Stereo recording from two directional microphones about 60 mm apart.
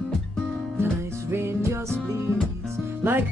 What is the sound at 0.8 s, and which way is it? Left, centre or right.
Music, right.